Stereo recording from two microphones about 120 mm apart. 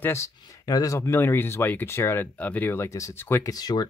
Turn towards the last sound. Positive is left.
turn(degrees=35)  # may be behind; listen again after turning